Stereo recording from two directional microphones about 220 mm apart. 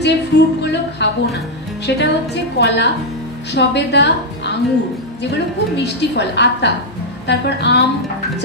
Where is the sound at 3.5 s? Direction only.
50° left (ahead or behind).